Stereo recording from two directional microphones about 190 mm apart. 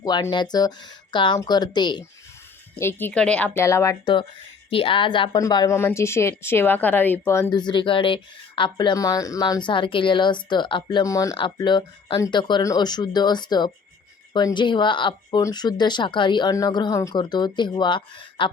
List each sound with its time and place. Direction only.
0.0 s speech: 20° left (ahead or behind)
2.7 s speech: 10° left (ahead or behind)
7.5 s speech: 25° left (ahead or behind)